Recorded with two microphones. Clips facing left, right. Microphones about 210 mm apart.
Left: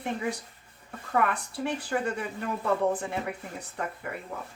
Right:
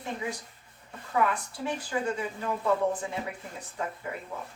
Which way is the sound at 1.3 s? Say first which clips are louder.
Left 1 dB; 60° left (ahead or behind).